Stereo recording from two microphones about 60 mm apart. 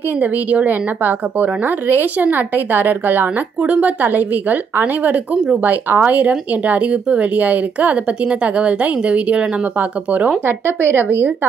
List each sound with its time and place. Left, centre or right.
0.2 s a woman's voice: right
10.4 s a woman's voice: right